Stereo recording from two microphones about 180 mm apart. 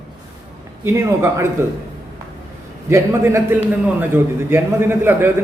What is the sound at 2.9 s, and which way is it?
A man's voice, 15° right (ahead or behind).